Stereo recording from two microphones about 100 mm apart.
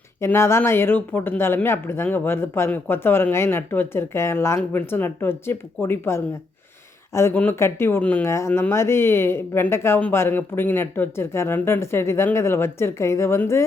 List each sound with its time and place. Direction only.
0.3 s speech: 25° left (ahead or behind)